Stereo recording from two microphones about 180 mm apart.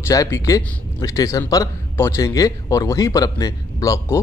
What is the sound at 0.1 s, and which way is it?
A man's voice, 20° left (ahead or behind).